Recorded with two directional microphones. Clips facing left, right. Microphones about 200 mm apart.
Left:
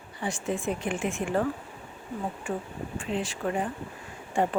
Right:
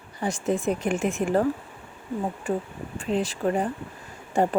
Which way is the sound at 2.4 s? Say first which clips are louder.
Right 4 dB; 35° right (ahead or behind).